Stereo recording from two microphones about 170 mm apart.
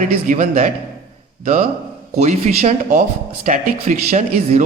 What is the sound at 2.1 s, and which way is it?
Speech, 40° right (ahead or behind).